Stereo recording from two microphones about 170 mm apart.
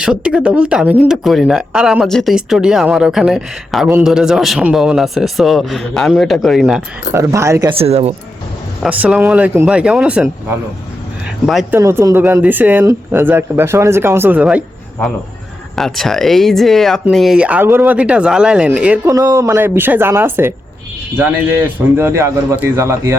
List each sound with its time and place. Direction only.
0.0 s speech: 5° right (ahead or behind)
7.1 s speech: 15° right (ahead or behind)
7.7 s speech: 35° right (ahead or behind)
8.8 s speech: 5° right (ahead or behind)
11.7 s speech: 15° right (ahead or behind)
15.7 s speech: centre (ahead or behind)
19.1 s speech: 20° right (ahead or behind)